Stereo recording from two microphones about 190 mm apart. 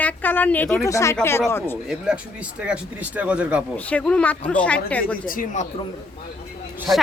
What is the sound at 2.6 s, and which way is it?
Speech, 5° right (ahead or behind).